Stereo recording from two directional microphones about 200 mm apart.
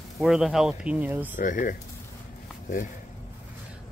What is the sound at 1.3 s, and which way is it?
Speech, 40° left (ahead or behind).